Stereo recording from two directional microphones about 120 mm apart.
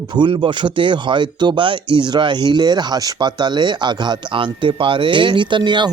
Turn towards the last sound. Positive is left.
turn(degrees=-40)  # may be behind; listen again after turning